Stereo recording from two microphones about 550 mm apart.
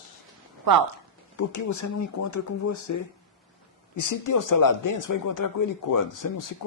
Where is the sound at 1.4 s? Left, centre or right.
Left.